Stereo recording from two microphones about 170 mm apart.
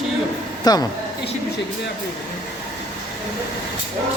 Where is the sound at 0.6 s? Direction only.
25° left (ahead or behind).